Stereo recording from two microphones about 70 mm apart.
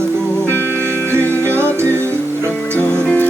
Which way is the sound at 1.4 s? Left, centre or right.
Right.